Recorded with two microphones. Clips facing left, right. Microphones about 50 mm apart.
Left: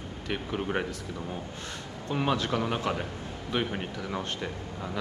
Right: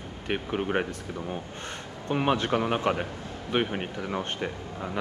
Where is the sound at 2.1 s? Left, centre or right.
Right.